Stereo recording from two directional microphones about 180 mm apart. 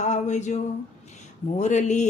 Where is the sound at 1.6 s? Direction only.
40° left (ahead or behind).